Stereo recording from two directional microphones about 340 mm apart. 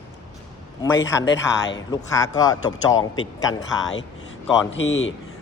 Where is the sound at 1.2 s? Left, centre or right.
Left.